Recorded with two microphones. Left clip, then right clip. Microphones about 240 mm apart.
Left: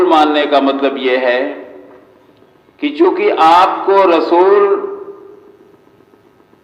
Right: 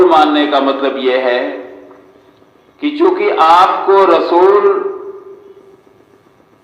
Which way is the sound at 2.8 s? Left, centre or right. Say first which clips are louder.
Even; left.